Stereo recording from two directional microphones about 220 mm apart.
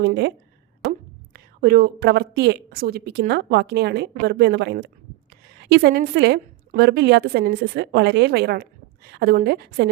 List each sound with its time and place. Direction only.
0.0 s speech: 50° right (ahead or behind)